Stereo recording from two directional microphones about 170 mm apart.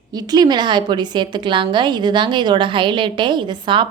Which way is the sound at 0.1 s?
25° right (ahead or behind).